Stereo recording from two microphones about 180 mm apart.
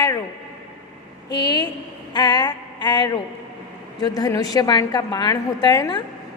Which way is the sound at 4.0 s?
20° left (ahead or behind).